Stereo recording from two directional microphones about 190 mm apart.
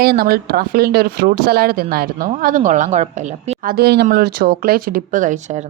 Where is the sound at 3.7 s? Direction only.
55° right (ahead or behind).